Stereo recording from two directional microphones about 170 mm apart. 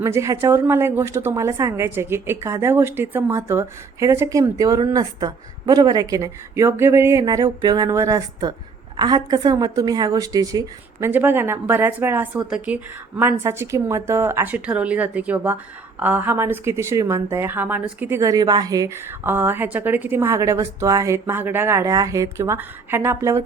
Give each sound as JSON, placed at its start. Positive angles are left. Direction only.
{"t": 0.0, "sound": "a woman's voice", "side_deg": -15}
{"t": 11.1, "sound": "a woman's voice", "side_deg": -10}